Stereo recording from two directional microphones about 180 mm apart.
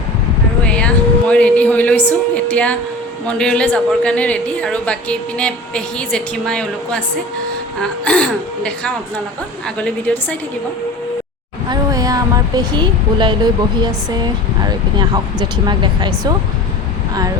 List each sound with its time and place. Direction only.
0.6 s a sound: 5° left (ahead or behind)
1.3 s a woman's voice: 5° left (ahead or behind)
11.7 s speech: 20° right (ahead or behind)